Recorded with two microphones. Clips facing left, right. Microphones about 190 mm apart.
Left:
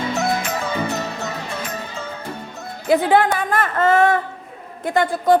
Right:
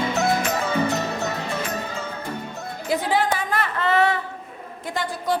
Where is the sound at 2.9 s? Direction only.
60° left (ahead or behind).